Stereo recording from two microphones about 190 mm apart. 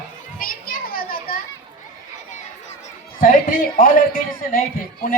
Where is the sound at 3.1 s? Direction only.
50° left (ahead or behind).